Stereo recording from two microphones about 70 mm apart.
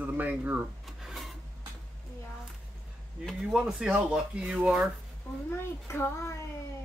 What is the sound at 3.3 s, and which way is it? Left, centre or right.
Speech, centre.